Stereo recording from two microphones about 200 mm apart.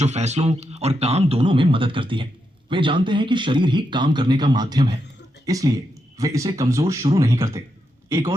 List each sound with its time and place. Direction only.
0.0 s speech: 35° right (ahead or behind); by 7.6 s 15° right (ahead or behind)